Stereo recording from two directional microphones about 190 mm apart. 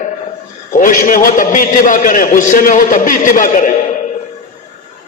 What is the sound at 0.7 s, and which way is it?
A man's voice, 45° left (ahead or behind).